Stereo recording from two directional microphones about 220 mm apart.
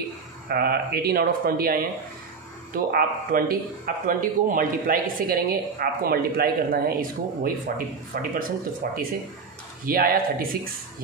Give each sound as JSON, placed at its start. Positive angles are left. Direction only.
{"t": 0.5, "sound": "a man's voice", "side_deg": -45}